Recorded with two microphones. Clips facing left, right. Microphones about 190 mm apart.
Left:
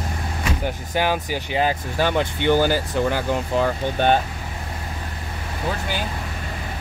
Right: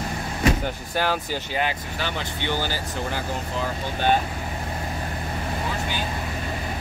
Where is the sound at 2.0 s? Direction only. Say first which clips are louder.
Left 10 dB; 50° left (ahead or behind).